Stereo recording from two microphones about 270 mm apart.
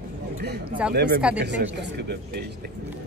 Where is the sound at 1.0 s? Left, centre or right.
Right.